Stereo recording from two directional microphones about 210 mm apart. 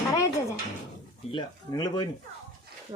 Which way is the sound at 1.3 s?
20° left (ahead or behind).